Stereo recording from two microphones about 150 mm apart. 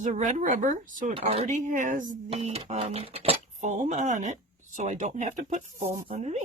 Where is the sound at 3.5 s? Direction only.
55° right (ahead or behind).